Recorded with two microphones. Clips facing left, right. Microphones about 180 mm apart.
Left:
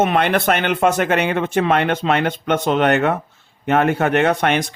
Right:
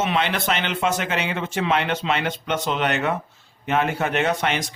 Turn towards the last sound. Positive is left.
turn(degrees=55)  # may be behind; listen again after turning